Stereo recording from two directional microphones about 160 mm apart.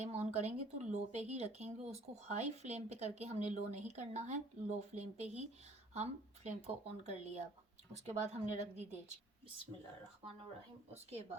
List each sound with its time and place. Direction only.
0.0 s speech: 45° right (ahead or behind)
10.9 s a woman's voice: 40° right (ahead or behind)